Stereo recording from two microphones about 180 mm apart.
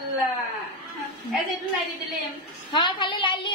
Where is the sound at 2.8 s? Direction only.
25° left (ahead or behind).